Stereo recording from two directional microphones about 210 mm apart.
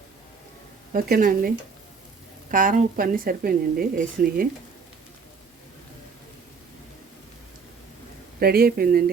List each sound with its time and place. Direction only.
0.9 s speech: 45° right (ahead or behind)
8.4 s speech: 45° right (ahead or behind)